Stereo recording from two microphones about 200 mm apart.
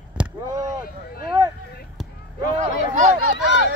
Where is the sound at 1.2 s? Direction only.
25° right (ahead or behind).